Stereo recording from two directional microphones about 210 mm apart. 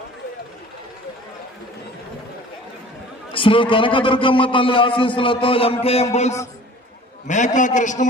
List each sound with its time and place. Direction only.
3.3 s a man's voice: 25° left (ahead or behind)